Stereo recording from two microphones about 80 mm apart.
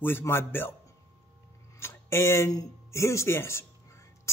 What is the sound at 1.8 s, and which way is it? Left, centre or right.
Speech, left.